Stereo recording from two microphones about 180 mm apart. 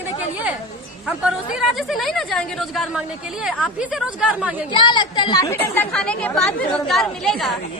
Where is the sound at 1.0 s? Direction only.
5° right (ahead or behind).